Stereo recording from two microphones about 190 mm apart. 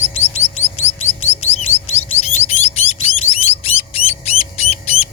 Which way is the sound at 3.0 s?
30° left (ahead or behind).